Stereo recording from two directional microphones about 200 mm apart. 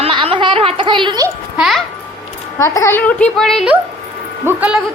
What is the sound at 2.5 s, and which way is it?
A child's voice, 15° left (ahead or behind).